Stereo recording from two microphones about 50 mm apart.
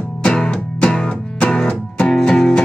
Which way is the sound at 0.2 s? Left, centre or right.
Centre.